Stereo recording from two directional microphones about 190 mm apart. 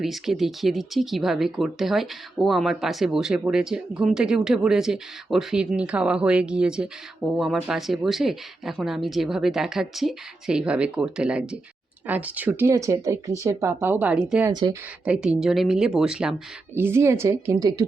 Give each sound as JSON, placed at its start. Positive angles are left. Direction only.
{"t": 0.0, "sound": "speech", "side_deg": 0}
{"t": 14.4, "sound": "speech", "side_deg": -20}
{"t": 15.0, "sound": "speech", "side_deg": -5}